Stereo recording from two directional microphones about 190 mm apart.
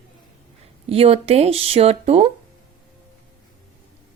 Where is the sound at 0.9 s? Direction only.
30° right (ahead or behind).